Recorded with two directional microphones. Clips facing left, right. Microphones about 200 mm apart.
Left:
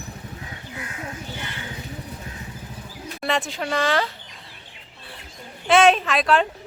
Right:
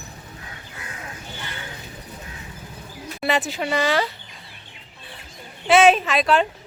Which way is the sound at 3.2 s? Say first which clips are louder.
Right 2 dB; 5° right (ahead or behind).